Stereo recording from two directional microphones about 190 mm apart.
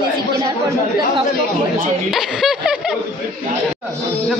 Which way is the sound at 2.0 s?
Centre (ahead or behind).